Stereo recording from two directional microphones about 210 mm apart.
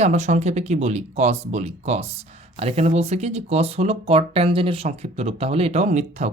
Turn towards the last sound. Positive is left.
turn(degrees=-35)  # may be behind; listen again after turning